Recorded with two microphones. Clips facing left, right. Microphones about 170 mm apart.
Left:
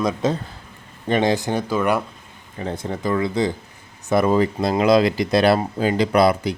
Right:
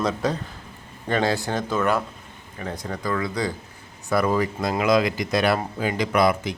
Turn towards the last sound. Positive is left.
turn(degrees=30)  # may be behind; listen again after turning